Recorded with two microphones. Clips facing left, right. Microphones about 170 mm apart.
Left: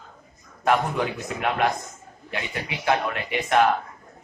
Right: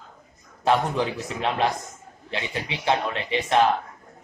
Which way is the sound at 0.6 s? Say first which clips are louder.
Even; 30° right (ahead or behind).